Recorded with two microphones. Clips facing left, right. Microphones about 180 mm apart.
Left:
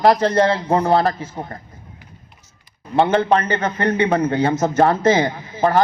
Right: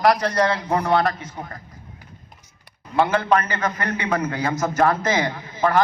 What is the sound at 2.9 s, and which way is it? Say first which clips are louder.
A man's voice: left 3 dB; 30° left (ahead or behind).